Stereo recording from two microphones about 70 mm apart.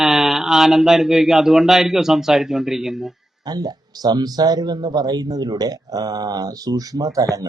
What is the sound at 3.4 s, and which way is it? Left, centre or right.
Speech, right.